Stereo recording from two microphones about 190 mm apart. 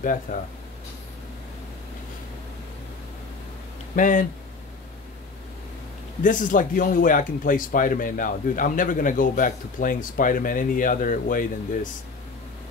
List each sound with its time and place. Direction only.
0.0 s speech: 45° left (ahead or behind)
3.9 s speech: 45° left (ahead or behind)
6.2 s speech: 45° left (ahead or behind)